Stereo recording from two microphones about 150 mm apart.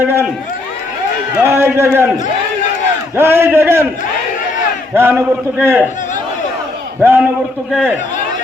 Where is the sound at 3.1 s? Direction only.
15° right (ahead or behind).